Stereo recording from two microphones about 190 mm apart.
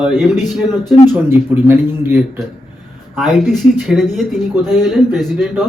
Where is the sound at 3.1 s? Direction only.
Centre (ahead or behind).